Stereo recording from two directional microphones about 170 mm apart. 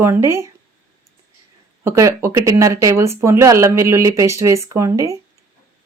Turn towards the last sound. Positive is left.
turn(degrees=-20)  # may be behind; listen again after turning